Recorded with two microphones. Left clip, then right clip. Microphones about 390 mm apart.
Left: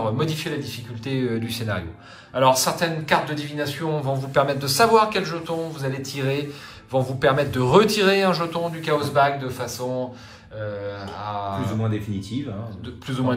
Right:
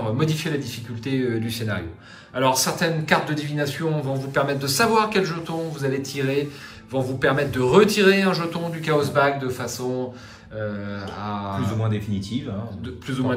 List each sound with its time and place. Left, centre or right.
0.0 s speech: centre
10.7 s mantra: centre
11.9 s speech: centre